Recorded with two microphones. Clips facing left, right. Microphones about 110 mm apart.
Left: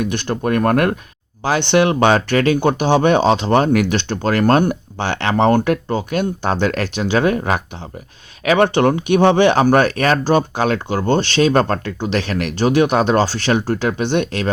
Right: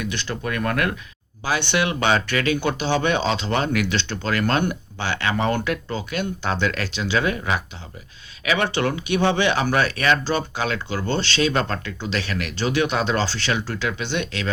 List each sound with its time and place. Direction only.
0.0 s speech: 50° left (ahead or behind)